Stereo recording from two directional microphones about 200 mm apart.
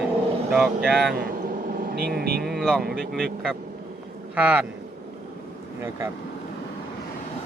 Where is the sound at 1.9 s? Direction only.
50° right (ahead or behind).